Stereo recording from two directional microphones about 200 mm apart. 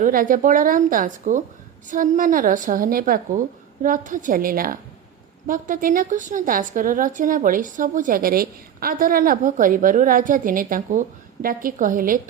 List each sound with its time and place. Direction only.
0.0 s a woman's voice: 45° right (ahead or behind)